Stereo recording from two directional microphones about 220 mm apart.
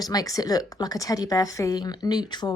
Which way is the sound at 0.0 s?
15° left (ahead or behind).